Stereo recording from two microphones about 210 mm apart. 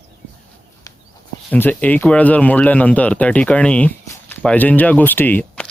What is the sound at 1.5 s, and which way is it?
Speech, 10° left (ahead or behind).